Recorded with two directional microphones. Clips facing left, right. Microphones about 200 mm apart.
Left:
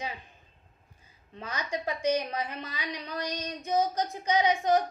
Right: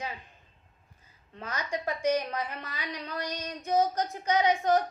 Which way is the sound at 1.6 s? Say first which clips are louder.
Even; 15° left (ahead or behind).